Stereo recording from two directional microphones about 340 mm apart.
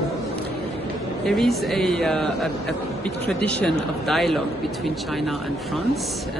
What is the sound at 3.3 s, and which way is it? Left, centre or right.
Speech, centre.